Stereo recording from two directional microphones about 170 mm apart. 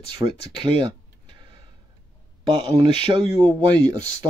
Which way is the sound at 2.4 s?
25° right (ahead or behind).